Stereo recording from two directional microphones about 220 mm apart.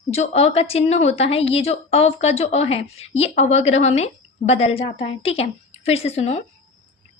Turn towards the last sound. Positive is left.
turn(degrees=30)  # may be behind; listen again after turning